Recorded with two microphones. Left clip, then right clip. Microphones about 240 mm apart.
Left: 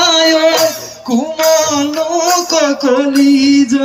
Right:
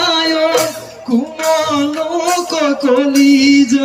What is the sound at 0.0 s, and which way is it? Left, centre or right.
Music, centre.